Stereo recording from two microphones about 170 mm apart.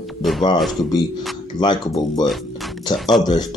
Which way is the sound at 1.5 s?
25° left (ahead or behind).